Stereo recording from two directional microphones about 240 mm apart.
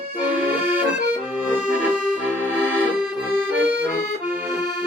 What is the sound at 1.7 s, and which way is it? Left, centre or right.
Accordion, centre.